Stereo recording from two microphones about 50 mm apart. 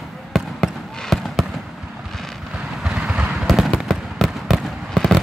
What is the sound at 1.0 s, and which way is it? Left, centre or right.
Basketball bounce, centre.